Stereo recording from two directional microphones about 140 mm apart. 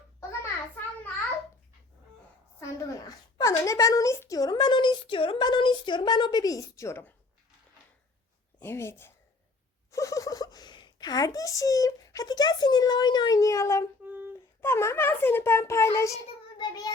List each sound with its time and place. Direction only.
2.6 s a woman's voice: 25° left (ahead or behind)
8.6 s speech: 20° left (ahead or behind)
14.0 s humming: 15° right (ahead or behind)
14.6 s a child's voice: 20° left (ahead or behind)